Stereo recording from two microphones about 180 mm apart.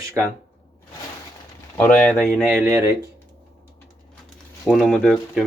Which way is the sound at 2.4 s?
10° right (ahead or behind).